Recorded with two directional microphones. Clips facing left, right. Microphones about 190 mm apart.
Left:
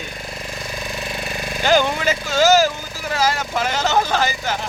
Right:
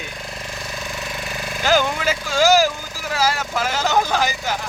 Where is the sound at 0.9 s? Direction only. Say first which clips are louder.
Left 2 dB; 20° left (ahead or behind).